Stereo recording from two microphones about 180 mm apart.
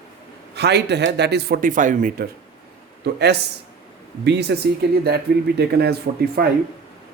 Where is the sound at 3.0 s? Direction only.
65° right (ahead or behind).